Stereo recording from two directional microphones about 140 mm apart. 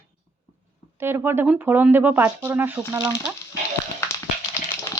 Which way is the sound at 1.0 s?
15° right (ahead or behind).